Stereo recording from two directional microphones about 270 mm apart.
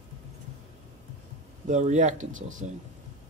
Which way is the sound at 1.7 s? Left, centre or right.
Right.